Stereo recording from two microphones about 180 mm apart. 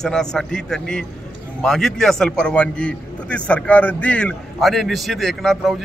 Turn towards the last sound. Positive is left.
turn(degrees=0)  # may be behind; listen again after turning